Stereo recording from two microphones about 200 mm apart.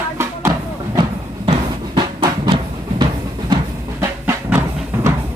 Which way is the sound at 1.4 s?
25° right (ahead or behind).